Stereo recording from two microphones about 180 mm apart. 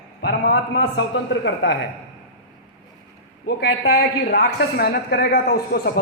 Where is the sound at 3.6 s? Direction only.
60° left (ahead or behind).